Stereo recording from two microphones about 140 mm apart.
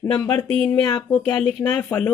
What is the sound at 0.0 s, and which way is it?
Speech, 30° left (ahead or behind).